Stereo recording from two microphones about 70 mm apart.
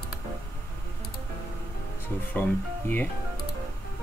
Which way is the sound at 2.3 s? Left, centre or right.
Left.